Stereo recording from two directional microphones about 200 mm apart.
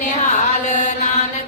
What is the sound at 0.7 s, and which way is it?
Mantra, 35° left (ahead or behind).